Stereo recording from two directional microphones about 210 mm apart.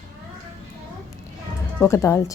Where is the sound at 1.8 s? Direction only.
10° left (ahead or behind).